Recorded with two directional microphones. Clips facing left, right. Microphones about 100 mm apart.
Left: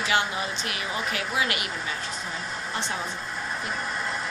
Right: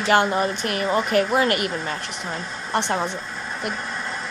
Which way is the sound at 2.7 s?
60° right (ahead or behind).